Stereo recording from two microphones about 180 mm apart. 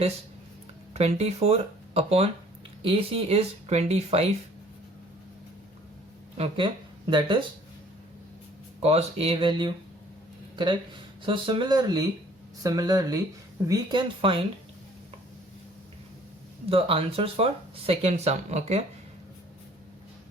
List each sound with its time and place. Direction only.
0.9 s speech: 35° right (ahead or behind)
6.3 s speech: 35° right (ahead or behind)
8.8 s speech: 35° right (ahead or behind)
16.6 s speech: 30° right (ahead or behind)